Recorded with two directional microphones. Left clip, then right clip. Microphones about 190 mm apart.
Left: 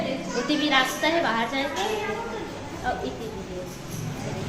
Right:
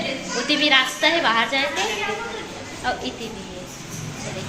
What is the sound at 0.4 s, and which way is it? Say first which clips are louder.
A woman's voice: right 5 dB; 15° right (ahead or behind).